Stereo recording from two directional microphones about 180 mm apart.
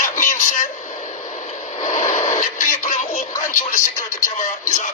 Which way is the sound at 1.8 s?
45° left (ahead or behind).